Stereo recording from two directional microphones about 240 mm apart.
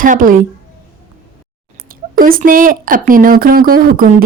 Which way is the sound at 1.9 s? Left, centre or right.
Right.